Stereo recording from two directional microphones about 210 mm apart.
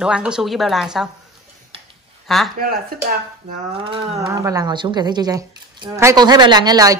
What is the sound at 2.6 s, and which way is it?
Speech, 45° right (ahead or behind).